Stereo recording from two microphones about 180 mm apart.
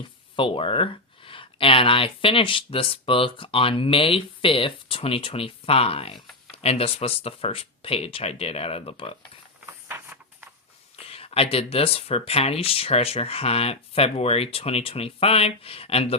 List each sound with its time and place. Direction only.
0.3 s speech: 30° left (ahead or behind)
9.9 s a sound: 10° right (ahead or behind)
11.0 s speech: 30° left (ahead or behind)